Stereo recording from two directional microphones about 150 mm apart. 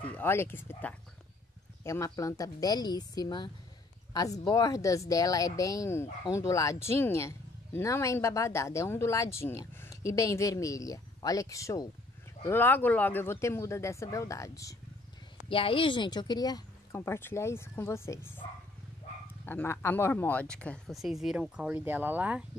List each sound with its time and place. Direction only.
0.1 s speech: 15° left (ahead or behind)
15.5 s speech: 35° left (ahead or behind); by 18.4 s 20° left (ahead or behind)
19.4 s speech: 15° left (ahead or behind); by 22.4 s 10° right (ahead or behind)